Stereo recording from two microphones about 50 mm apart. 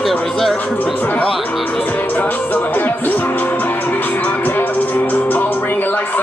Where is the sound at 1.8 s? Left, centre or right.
Left.